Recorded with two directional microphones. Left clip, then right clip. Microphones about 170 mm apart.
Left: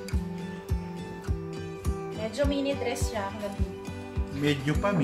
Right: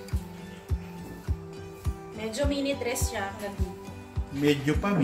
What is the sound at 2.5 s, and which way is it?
Music, 15° right (ahead or behind).